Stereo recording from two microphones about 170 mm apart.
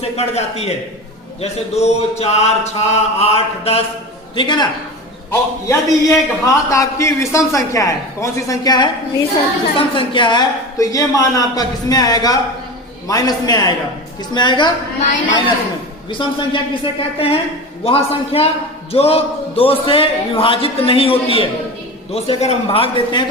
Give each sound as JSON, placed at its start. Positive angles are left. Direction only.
{"t": 0.0, "sound": "a man's voice", "side_deg": 35}
{"t": 16.0, "sound": "a man's voice", "side_deg": 30}